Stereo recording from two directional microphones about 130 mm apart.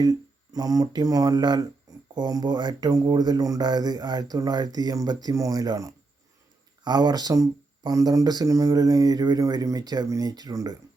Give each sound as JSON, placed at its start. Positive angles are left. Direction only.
{"t": 0.0, "sound": "speech", "side_deg": -30}